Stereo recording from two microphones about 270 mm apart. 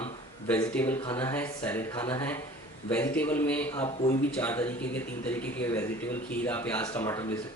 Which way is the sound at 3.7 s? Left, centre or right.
Left.